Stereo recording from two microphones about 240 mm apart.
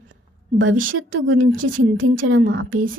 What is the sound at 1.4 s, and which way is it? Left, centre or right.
Speech, right.